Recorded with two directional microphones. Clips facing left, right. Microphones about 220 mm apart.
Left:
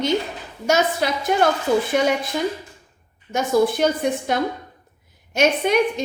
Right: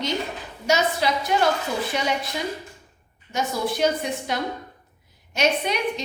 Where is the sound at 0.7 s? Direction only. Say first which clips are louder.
Left 2 dB; 50° left (ahead or behind).